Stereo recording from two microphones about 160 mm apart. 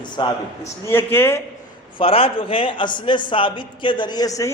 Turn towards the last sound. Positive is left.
turn(degrees=20)  # may be behind; listen again after turning